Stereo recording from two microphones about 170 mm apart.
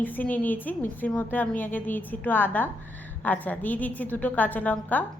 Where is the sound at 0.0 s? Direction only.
10° left (ahead or behind).